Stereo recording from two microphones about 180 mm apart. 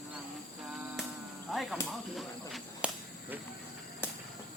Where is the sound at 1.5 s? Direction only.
Centre (ahead or behind).